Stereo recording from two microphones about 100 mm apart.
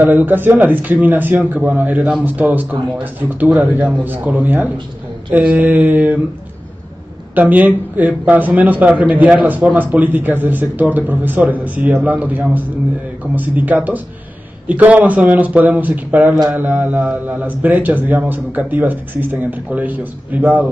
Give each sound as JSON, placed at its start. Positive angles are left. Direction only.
{"t": 0.0, "sound": "speech", "side_deg": -20}
{"t": 7.3, "sound": "speech", "side_deg": -15}